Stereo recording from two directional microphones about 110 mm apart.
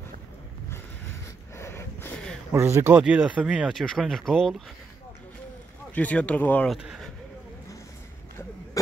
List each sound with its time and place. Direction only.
1.6 s a sound: 25° left (ahead or behind)
2.5 s speech: 25° right (ahead or behind)
3.0 s speech: 10° right (ahead or behind)
5.9 s speech: 15° left (ahead or behind)
6.7 s speech: centre (ahead or behind)